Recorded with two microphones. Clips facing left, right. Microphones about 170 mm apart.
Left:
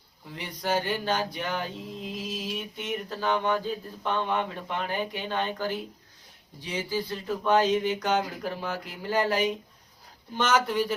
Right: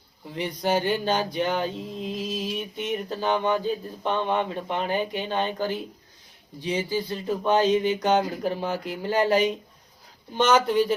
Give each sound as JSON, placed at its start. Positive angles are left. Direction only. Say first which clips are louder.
{"t": 0.3, "sound": "speech", "louder": "right 4 dB", "side_deg": -20}